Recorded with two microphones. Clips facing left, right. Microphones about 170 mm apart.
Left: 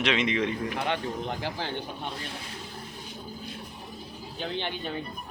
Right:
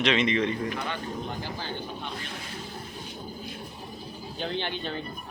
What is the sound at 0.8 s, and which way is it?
Speech, 80° left.